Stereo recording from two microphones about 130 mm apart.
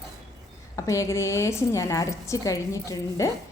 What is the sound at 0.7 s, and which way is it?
A woman's voice, 25° left (ahead or behind).